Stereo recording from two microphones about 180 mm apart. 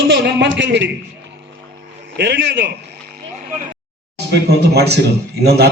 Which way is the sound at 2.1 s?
70° right (ahead or behind).